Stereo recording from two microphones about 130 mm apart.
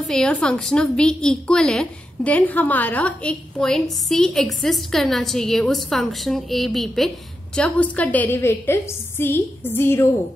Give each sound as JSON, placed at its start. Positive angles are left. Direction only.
{"t": 0.0, "sound": "a woman's voice", "side_deg": 5}